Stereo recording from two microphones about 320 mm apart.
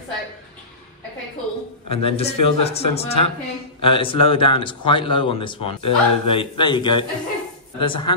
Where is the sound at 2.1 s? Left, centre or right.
Centre.